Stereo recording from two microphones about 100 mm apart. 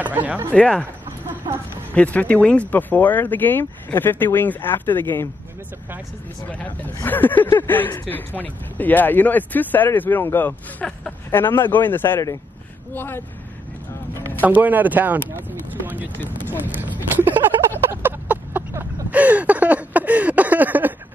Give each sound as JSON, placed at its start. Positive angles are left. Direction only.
{"t": 0.0, "sound": "speech", "side_deg": -15}
{"t": 0.5, "sound": "speech", "side_deg": 10}
{"t": 1.5, "sound": "a sound", "side_deg": -45}
{"t": 2.0, "sound": "speech", "side_deg": 15}
{"t": 7.0, "sound": "speech", "side_deg": 20}
{"t": 14.4, "sound": "speech", "side_deg": -15}
{"t": 15.3, "sound": "a sound", "side_deg": -20}